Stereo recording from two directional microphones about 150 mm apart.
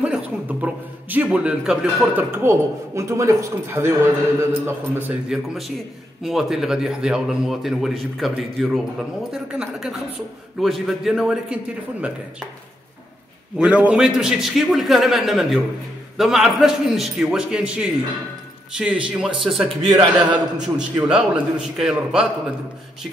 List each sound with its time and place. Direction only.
0.1 s a man's voice: 10° right (ahead or behind)
2.3 s a man's voice: 20° right (ahead or behind)
6.2 s a man's voice: centre (ahead or behind)
13.6 s a man's voice: 5° right (ahead or behind)
19.9 s a man's voice: 30° right (ahead or behind)
21.1 s a man's voice: 5° right (ahead or behind)